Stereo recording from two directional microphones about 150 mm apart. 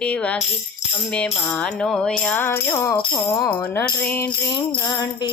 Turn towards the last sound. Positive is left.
turn(degrees=25)  # may be behind; listen again after turning